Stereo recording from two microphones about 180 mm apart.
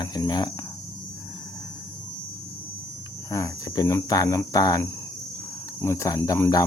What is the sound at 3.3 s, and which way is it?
Speech, 20° left (ahead or behind).